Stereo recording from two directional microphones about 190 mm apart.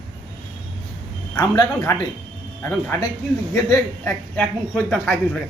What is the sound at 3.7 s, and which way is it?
Speech, 10° left (ahead or behind).